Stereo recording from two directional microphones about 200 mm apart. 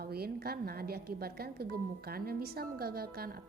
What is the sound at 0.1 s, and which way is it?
A woman's voice, 50° right (ahead or behind).